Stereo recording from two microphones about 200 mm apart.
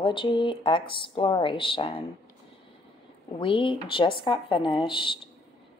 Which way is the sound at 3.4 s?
25° left (ahead or behind).